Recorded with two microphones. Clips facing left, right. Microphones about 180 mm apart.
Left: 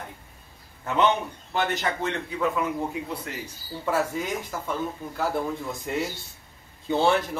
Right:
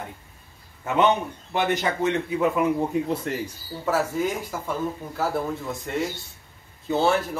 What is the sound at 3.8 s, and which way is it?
Speech, 5° right (ahead or behind).